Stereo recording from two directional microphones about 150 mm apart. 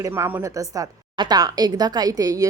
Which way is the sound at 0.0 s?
15° right (ahead or behind).